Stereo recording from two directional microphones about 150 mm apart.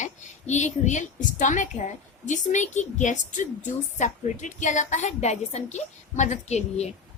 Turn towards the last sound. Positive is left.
turn(degrees=45)  # may be behind; listen again after turning